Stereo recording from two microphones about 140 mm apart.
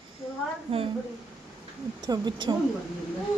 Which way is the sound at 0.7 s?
45° right (ahead or behind).